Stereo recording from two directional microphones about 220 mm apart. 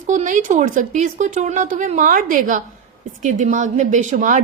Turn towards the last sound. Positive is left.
turn(degrees=-35)  # may be behind; listen again after turning